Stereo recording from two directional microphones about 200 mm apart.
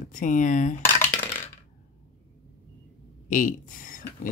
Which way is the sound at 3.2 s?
40° left (ahead or behind).